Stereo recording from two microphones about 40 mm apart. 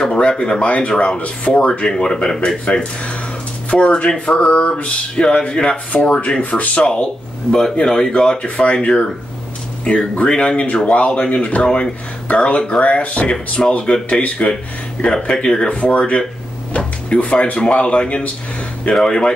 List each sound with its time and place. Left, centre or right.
0.0 s speech: centre
1.9 s speech: centre
5.1 s speech: centre
5.4 s speech: left
16.7 s drawer open or close: left
17.3 s speech: left